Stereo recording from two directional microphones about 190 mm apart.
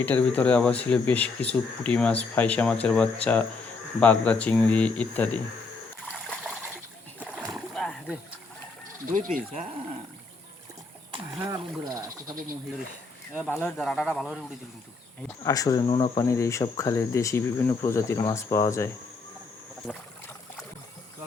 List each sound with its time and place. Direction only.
0.0 s speech: 10° left (ahead or behind)
6.1 s trickle: centre (ahead or behind)
7.3 s splash: centre (ahead or behind)
9.1 s speech: 45° right (ahead or behind)
11.3 s speech: 20° right (ahead or behind)
13.5 s speech: 10° left (ahead or behind)
15.4 s speech: 15° left (ahead or behind)